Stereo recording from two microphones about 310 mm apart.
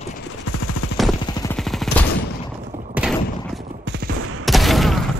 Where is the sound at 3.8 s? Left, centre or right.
Right.